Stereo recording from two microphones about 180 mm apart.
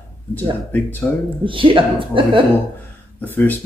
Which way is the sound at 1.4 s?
30° right (ahead or behind).